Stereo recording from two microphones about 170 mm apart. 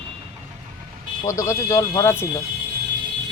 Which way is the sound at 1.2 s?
15° left (ahead or behind).